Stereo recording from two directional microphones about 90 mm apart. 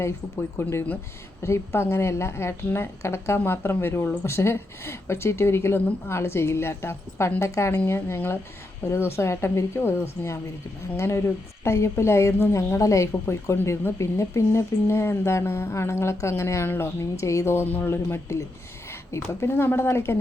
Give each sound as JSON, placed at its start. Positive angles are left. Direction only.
{"t": 0.5, "sound": "a woman's voice", "side_deg": 25}